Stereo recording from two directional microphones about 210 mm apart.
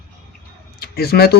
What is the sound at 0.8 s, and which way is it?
Speech, 45° left (ahead or behind).